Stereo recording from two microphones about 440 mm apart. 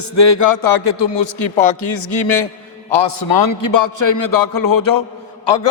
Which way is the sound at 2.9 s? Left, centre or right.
Left.